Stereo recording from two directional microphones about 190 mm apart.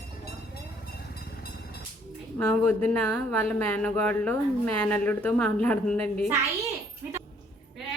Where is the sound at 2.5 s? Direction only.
10° left (ahead or behind).